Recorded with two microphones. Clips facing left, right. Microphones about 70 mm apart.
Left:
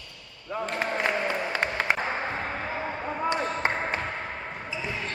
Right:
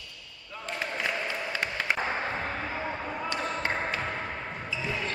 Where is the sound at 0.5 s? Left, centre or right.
Left.